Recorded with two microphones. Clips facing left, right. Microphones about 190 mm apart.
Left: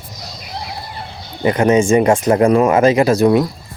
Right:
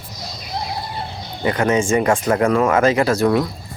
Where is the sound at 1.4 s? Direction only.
25° left (ahead or behind).